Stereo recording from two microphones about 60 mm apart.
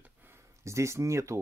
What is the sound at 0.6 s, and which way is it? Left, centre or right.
Speech, right.